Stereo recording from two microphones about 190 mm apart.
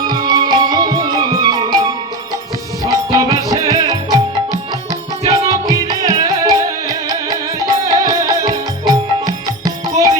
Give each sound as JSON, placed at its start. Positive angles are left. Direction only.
{"t": 0.3, "sound": "music", "side_deg": -20}
{"t": 2.8, "sound": "music", "side_deg": -20}